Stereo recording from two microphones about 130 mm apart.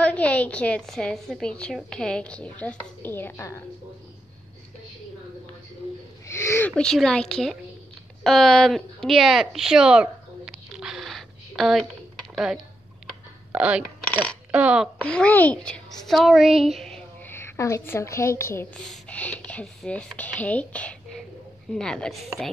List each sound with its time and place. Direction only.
0.0 s a woman's voice: 10° left (ahead or behind)
6.2 s a sound: 20° left (ahead or behind)
6.7 s a woman's voice: 5° left (ahead or behind)
8.2 s a sound: 5° left (ahead or behind)
14.5 s speech: 10° right (ahead or behind)
15.0 s a woman's voice: 10° left (ahead or behind)
17.3 s a woman's voice: 20° left (ahead or behind)
18.8 s a woman's voice: 5° left (ahead or behind)